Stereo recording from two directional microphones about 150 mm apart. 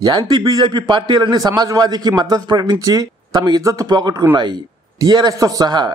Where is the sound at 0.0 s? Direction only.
30° right (ahead or behind).